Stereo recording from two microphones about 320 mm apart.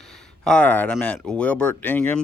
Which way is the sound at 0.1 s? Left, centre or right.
Centre.